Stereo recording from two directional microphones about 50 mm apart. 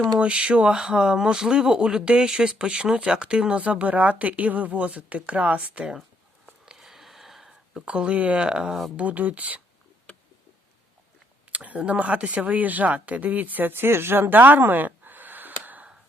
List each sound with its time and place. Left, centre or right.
0.2 s a woman's voice: right
6.7 s a sound: centre
7.9 s a woman's voice: right
9.0 s speech: right
11.5 s speech: right